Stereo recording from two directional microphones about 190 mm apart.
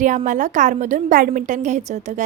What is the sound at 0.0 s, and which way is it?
A woman's voice, 40° right (ahead or behind).